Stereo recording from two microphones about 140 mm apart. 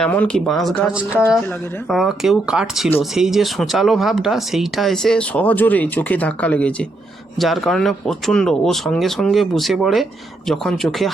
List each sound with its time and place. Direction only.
0.0 s speech: 10° left (ahead or behind)
0.9 s speech: 10° right (ahead or behind)